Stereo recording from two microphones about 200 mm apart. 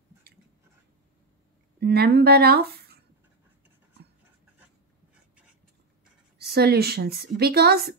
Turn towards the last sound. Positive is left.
turn(degrees=-50)  # may be behind; listen again after turning